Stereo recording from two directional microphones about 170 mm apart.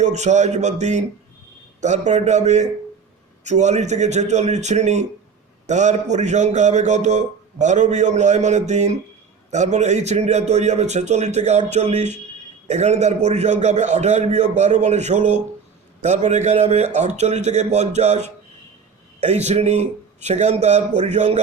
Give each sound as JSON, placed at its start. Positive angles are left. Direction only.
{"t": 0.0, "sound": "a man's voice", "side_deg": -45}